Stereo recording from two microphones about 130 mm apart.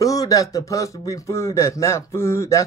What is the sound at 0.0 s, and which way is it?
Speech, 25° left (ahead or behind).